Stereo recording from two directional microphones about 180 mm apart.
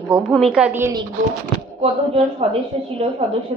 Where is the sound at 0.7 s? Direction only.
15° right (ahead or behind).